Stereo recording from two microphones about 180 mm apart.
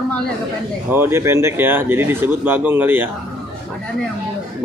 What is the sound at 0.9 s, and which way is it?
Speech, 15° right (ahead or behind).